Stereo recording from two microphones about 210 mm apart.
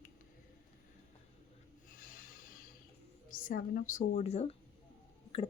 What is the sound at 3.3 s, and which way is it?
Speech, 40° left (ahead or behind).